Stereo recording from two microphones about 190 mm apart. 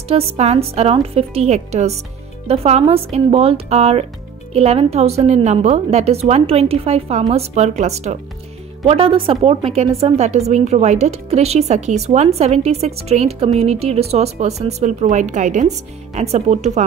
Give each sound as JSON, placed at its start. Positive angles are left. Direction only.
{"t": 0.1, "sound": "speech", "side_deg": -30}